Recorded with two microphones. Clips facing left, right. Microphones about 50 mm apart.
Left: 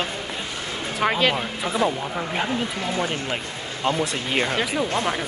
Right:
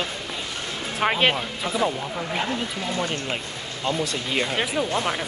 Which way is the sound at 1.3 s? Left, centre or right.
Centre.